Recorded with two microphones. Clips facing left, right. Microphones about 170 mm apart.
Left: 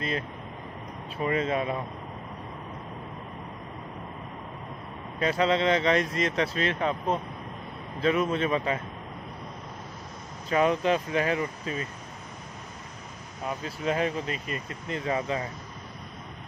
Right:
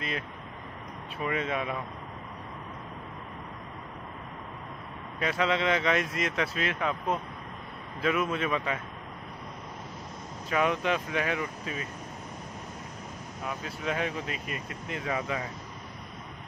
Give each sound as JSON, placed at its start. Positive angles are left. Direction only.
{"t": 1.2, "sound": "speech", "side_deg": 35}
{"t": 5.2, "sound": "speech", "side_deg": 35}
{"t": 8.0, "sound": "speech", "side_deg": 35}
{"t": 10.5, "sound": "speech", "side_deg": 35}
{"t": 13.8, "sound": "speech", "side_deg": 40}